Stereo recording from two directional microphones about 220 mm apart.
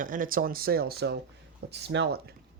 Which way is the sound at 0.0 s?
40° right (ahead or behind).